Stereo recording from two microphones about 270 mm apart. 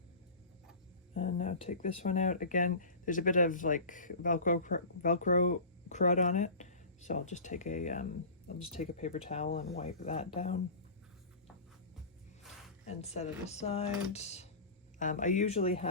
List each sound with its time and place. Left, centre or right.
1.1 s speech: left
12.9 s speech: left